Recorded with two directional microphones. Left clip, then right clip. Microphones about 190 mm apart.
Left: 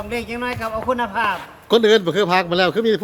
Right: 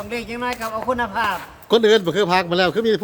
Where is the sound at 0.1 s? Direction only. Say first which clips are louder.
Even; 5° left (ahead or behind).